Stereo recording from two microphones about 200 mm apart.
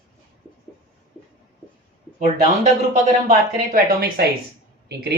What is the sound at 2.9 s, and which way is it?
Speech, 35° right (ahead or behind).